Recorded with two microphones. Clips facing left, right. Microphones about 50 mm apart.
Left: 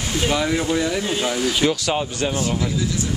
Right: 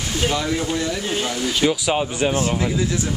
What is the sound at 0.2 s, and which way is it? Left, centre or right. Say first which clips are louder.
Speech: left 1 dB; centre.